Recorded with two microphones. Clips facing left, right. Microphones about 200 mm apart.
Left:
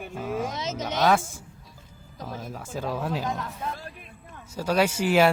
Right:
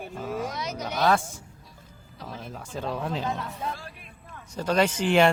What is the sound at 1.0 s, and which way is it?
Speech, 5° left (ahead or behind).